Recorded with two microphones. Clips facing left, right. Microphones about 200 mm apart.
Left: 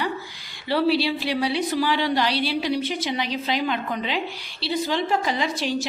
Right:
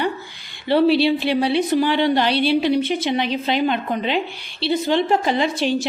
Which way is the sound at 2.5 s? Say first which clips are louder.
Right 7 dB; 55° right (ahead or behind).